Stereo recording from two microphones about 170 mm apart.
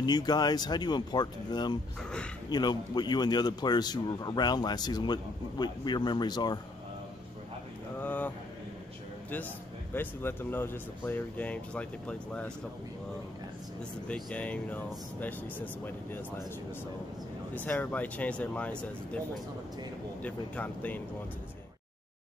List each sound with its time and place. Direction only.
0.0 s a man's voice: 25° left (ahead or behind)
8.0 s a sound: 10° left (ahead or behind)
9.9 s speech: 10° left (ahead or behind)
14.0 s speech: 5° left (ahead or behind)
17.6 s speech: 10° left (ahead or behind)